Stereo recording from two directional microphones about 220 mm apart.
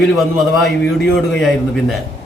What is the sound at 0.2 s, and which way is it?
A man's voice, centre (ahead or behind).